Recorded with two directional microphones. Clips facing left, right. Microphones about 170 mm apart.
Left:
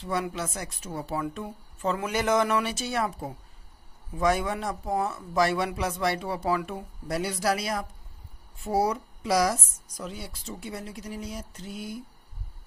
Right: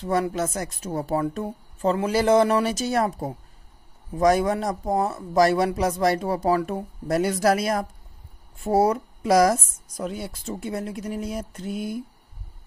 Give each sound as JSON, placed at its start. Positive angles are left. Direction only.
{"t": 0.0, "sound": "a man's voice", "side_deg": -40}